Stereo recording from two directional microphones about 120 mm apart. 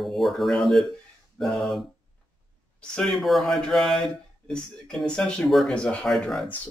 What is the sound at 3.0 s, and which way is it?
Speech, centre (ahead or behind).